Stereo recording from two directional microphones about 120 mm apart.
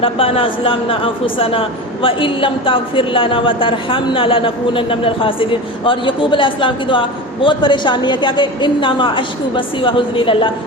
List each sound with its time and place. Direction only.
0.0 s a woman's voice: 50° left (ahead or behind)